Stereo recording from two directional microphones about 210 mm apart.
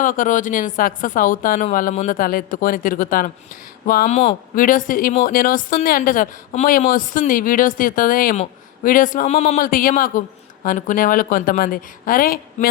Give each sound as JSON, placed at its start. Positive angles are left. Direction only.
{"t": 0.0, "sound": "a man's voice", "side_deg": 40}